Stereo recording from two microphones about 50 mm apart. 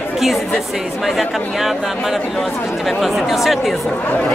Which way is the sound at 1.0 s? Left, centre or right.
Centre.